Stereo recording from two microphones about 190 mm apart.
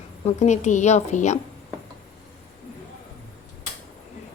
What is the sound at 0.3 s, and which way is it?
A woman's voice, 35° left (ahead or behind).